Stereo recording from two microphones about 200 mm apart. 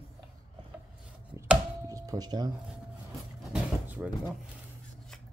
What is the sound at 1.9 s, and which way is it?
Speech, 20° right (ahead or behind).